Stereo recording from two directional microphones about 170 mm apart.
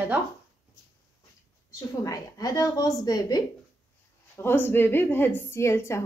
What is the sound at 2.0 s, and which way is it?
A woman's voice, 20° left (ahead or behind).